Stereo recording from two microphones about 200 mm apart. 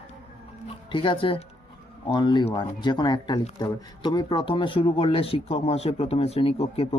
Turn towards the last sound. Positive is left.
turn(degrees=30)  # may be behind; listen again after turning